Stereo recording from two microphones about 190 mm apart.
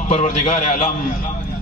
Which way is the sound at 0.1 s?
40° left (ahead or behind).